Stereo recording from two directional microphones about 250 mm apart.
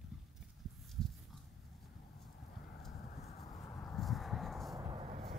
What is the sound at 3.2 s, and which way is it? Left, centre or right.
Clip-clop, left.